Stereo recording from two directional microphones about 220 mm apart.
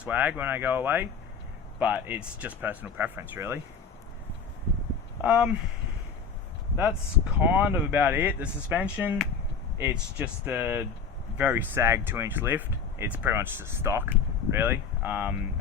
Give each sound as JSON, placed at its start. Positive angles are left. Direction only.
{"t": 0.0, "sound": "speech", "side_deg": -5}
{"t": 5.2, "sound": "speech", "side_deg": -5}
{"t": 7.3, "sound": "speech", "side_deg": -5}